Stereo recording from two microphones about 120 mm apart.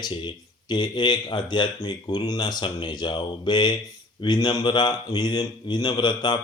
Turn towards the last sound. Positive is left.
turn(degrees=40)  # may be behind; listen again after turning